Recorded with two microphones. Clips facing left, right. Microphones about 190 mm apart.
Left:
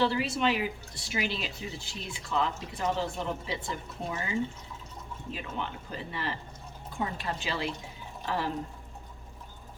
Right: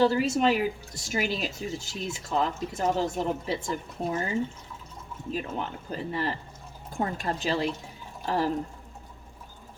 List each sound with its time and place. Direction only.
0.0 s speech: 45° right (ahead or behind)